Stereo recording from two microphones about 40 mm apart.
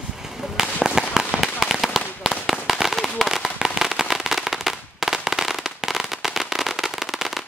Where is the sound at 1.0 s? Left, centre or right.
Centre.